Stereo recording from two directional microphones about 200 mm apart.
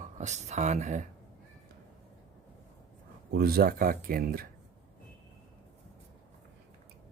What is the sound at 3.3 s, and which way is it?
Speech, 50° right (ahead or behind).